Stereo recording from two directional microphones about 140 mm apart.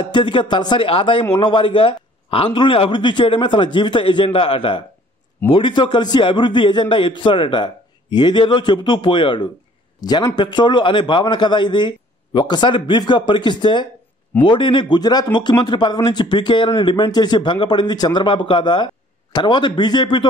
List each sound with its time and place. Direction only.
0.0 s a man's voice: 35° left (ahead or behind)